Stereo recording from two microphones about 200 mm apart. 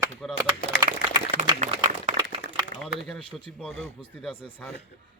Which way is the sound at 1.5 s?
35° right (ahead or behind).